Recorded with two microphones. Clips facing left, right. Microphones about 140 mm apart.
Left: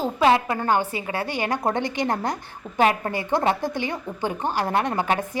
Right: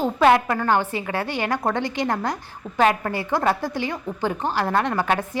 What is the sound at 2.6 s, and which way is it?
Speech, 5° right (ahead or behind).